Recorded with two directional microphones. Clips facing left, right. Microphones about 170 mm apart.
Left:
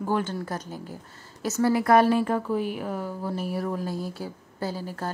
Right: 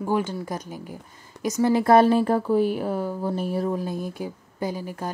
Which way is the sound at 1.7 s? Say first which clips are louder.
Right 3 dB; 25° right (ahead or behind).